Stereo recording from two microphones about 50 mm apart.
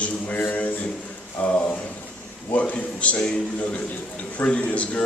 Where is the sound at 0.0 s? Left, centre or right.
Left.